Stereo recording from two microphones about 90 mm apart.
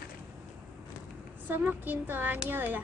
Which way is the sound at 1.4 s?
20° right (ahead or behind).